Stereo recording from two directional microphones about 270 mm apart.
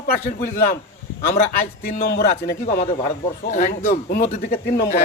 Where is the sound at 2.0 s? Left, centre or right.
Left.